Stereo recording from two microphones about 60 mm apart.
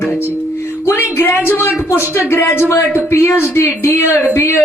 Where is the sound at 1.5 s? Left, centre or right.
Left.